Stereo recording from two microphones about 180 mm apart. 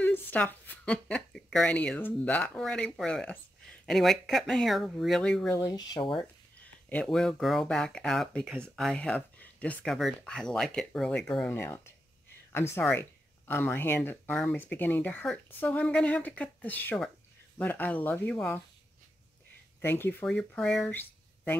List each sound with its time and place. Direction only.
0.0 s speech: 10° left (ahead or behind)
5.6 s speech: 20° left (ahead or behind)
6.9 s speech: 5° left (ahead or behind)
19.8 s speech: 10° left (ahead or behind)